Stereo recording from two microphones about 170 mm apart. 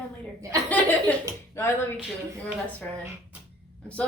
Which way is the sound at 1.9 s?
5° right (ahead or behind).